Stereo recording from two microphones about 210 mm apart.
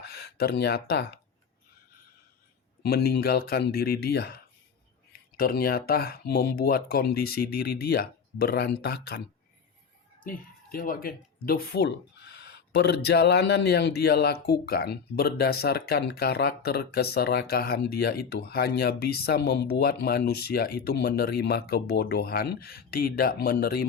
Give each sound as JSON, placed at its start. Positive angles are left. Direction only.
{"t": 0.1, "sound": "speech", "side_deg": 50}
{"t": 2.8, "sound": "speech", "side_deg": 50}
{"t": 5.4, "sound": "speech", "side_deg": 45}
{"t": 10.2, "sound": "speech", "side_deg": 40}